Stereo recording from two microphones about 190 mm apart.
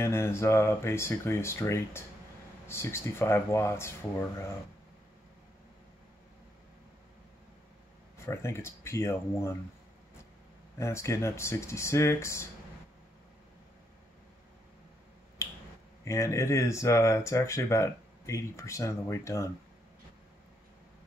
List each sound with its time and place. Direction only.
0.0 s speech: 15° left (ahead or behind)
8.3 s speech: 15° left (ahead or behind)
10.8 s speech: 15° left (ahead or behind)
16.0 s speech: 15° left (ahead or behind)